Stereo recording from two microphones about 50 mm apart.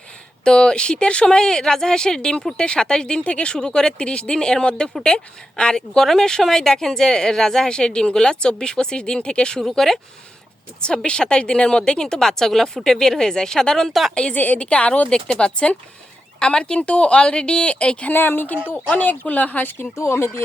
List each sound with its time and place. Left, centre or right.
0.4 s speech: centre
9.6 s speech: centre
10.8 s speech: centre
14.3 s a woman's voice: left
18.1 s speech: left
20.0 s speech: left